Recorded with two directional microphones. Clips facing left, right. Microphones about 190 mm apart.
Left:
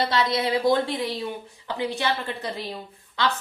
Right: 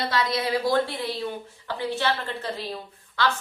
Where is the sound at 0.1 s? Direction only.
25° left (ahead or behind).